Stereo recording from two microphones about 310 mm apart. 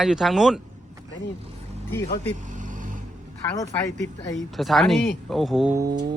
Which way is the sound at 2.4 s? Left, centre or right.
Right.